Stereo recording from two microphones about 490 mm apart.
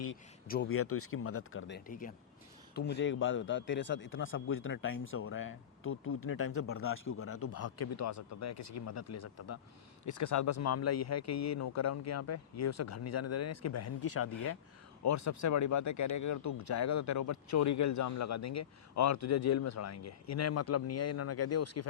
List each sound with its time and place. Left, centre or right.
0.1 s a man's voice: centre